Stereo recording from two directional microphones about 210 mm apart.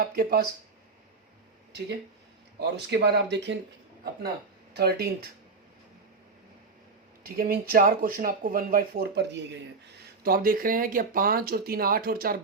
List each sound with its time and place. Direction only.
0.0 s speech: 45° right (ahead or behind)
2.6 s speech: 55° right (ahead or behind)
4.7 s speech: 50° right (ahead or behind)
7.3 s speech: 45° right (ahead or behind)
10.2 s speech: 45° right (ahead or behind)